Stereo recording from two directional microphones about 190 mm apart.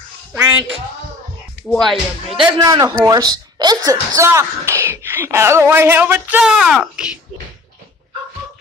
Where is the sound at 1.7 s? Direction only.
5° left (ahead or behind).